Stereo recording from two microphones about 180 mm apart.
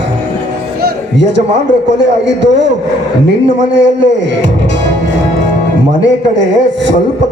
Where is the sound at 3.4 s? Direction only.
80° right.